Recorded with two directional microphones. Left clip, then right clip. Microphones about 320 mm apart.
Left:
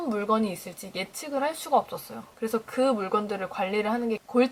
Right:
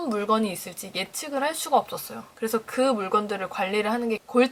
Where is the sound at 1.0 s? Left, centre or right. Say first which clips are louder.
Right 2 dB; centre.